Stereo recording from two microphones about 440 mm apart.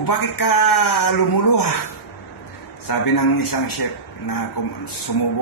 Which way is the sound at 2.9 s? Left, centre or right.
Left.